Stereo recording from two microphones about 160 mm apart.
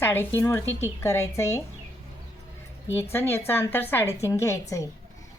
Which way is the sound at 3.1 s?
15° left (ahead or behind).